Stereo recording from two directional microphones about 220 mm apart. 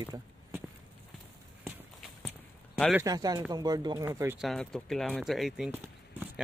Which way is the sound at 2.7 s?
Centre (ahead or behind).